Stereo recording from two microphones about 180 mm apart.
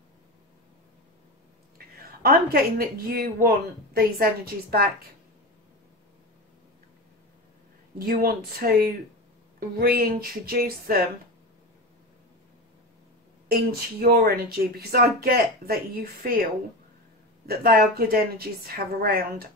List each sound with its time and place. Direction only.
2.2 s speech: 60° right (ahead or behind)
8.0 s speech: 55° right (ahead or behind)
13.5 s speech: 60° right (ahead or behind)
17.5 s speech: 55° right (ahead or behind)